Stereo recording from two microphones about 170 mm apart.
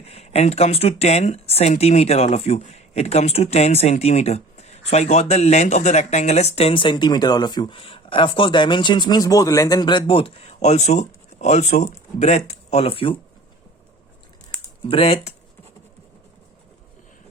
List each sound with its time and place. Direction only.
0.0 s speech: 40° left (ahead or behind)
14.8 s speech: 35° left (ahead or behind)